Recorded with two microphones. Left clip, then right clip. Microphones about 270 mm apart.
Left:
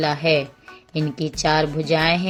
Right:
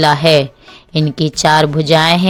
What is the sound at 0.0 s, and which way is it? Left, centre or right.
A woman's voice, right.